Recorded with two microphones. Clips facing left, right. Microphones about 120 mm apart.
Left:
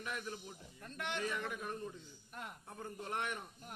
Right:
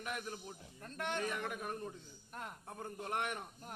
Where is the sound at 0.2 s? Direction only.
35° right (ahead or behind).